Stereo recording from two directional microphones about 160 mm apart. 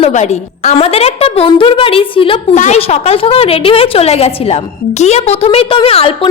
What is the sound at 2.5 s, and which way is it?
A woman's voice, 45° left (ahead or behind).